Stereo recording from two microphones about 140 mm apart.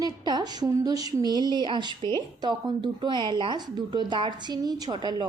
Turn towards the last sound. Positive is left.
turn(degrees=-30)  # may be behind; listen again after turning